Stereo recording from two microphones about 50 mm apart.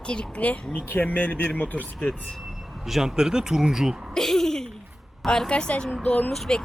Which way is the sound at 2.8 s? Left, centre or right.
Centre.